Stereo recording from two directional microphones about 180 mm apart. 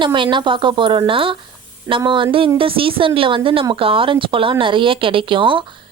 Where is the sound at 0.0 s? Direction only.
25° right (ahead or behind).